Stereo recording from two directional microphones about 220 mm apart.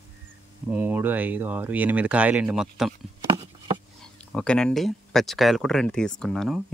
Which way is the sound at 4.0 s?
5° left (ahead or behind).